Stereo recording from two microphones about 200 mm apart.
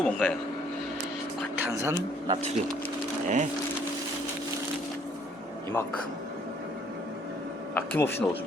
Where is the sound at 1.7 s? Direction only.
15° right (ahead or behind).